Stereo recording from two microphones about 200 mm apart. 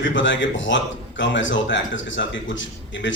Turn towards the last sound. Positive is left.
turn(degrees=70)  # may be behind; listen again after turning